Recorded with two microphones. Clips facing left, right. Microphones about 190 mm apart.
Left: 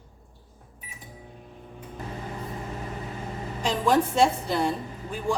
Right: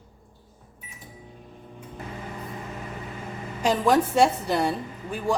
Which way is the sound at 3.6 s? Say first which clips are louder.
Right 2 dB; 10° right (ahead or behind).